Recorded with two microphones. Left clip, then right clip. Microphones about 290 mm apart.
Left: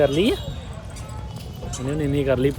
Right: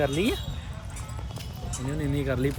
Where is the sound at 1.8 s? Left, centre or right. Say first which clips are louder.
Left 8 dB; centre.